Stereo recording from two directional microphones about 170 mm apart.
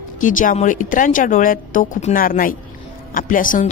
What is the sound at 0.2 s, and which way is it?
Speech, 50° left (ahead or behind).